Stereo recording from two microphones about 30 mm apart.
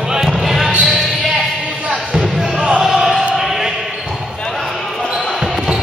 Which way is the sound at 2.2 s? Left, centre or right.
Centre.